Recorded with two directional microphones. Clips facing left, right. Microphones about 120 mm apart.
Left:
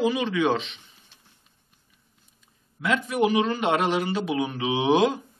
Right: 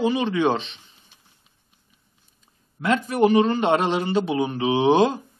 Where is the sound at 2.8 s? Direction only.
40° right (ahead or behind).